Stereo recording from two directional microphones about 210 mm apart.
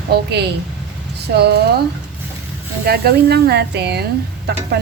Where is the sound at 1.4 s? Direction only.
50° right (ahead or behind).